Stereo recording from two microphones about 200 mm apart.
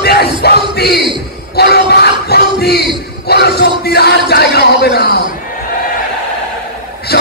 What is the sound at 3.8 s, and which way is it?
Speech, 55° left (ahead or behind).